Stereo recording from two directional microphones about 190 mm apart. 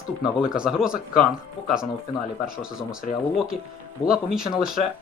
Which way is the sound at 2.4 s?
5° right (ahead or behind).